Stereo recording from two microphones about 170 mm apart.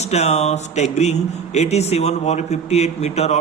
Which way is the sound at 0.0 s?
40° left (ahead or behind).